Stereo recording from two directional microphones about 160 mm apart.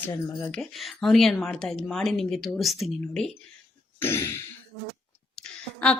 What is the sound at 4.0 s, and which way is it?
Speech, 15° left (ahead or behind).